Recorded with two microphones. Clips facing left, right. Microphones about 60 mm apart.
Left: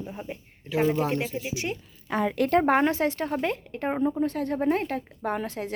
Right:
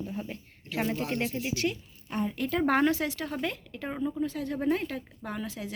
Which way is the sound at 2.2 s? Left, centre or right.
Left.